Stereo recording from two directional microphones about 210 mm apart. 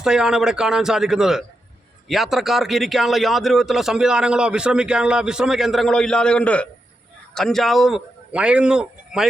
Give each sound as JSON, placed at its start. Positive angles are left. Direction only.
{"t": 0.0, "sound": "a man's voice", "side_deg": -5}